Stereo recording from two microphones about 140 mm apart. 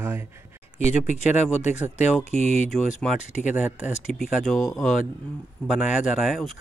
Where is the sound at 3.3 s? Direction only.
Centre (ahead or behind).